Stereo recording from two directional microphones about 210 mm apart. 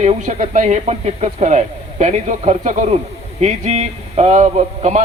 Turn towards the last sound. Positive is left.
turn(degrees=-30)  # may be behind; listen again after turning